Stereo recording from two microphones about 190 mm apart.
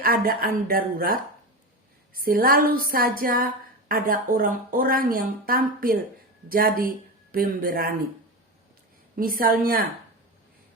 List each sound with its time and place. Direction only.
0.0 s a woman's voice: 50° right (ahead or behind)
9.1 s a woman's voice: 50° right (ahead or behind)